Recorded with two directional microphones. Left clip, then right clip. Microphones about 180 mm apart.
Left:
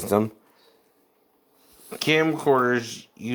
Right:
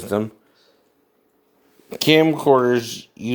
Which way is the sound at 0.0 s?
10° left (ahead or behind).